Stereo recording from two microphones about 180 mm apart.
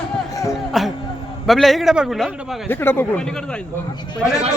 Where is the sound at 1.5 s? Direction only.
Centre (ahead or behind).